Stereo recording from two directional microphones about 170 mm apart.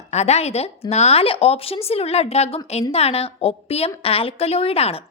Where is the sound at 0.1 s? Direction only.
40° left (ahead or behind).